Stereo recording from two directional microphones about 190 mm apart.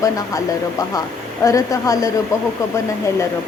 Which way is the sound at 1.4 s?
15° left (ahead or behind).